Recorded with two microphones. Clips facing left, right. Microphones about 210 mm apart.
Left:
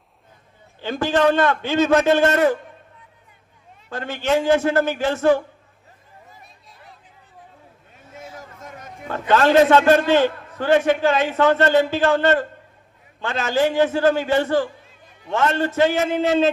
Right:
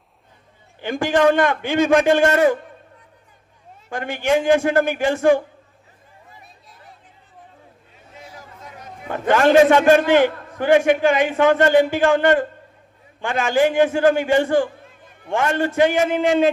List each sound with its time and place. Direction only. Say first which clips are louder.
0.8 s a man's voice: right 1 dB; 15° right (ahead or behind)
3.9 s a man's voice: right 1 dB; 15° right (ahead or behind)
8.2 s a sound: left 2 dB; 45° left (ahead or behind)
9.3 s a man's voice: right 1 dB; 15° right (ahead or behind)
14.6 s a sound: right 3 dB; 50° right (ahead or behind)
15.4 s a man's voice: right 1 dB; 15° right (ahead or behind)